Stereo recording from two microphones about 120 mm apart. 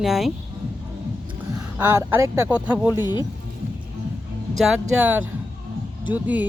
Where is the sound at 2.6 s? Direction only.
10° right (ahead or behind).